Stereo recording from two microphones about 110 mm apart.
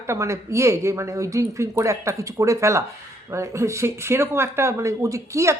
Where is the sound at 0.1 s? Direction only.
25° right (ahead or behind).